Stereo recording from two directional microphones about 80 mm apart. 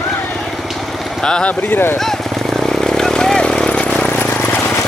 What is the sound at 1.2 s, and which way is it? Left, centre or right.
Speech, centre.